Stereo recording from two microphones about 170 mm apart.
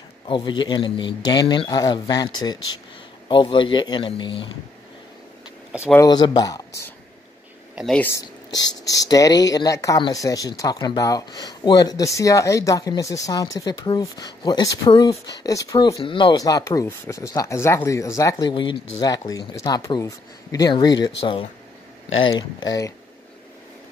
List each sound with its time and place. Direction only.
0.3 s speech: 25° left (ahead or behind)
5.9 s speech: 25° left (ahead or behind)
7.7 s speech: 5° left (ahead or behind)
8.6 s speech: 20° left (ahead or behind)
16.0 s speech: 30° left (ahead or behind)